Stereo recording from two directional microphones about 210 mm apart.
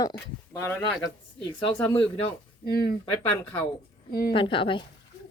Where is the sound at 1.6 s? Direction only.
25° left (ahead or behind).